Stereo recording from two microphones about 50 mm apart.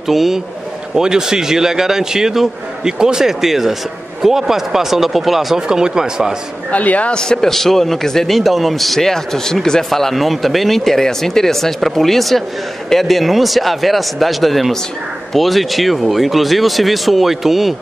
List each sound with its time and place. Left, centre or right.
0.1 s a man's voice: centre
6.7 s speech: left
7.2 s a man's voice: centre